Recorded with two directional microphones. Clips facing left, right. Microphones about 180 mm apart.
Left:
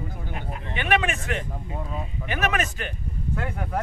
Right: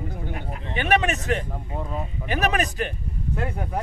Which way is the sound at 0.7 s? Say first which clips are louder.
Right 2 dB; 40° right (ahead or behind).